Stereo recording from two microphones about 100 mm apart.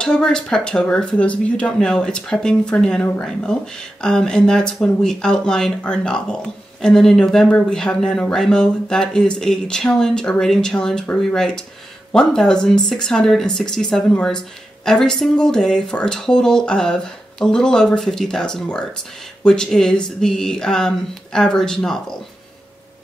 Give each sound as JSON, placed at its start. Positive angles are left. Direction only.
{"t": 0.0, "sound": "speech", "side_deg": 10}